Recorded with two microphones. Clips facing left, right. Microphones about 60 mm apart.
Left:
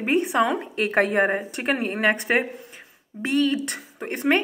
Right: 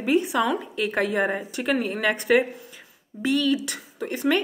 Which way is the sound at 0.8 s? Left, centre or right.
Left.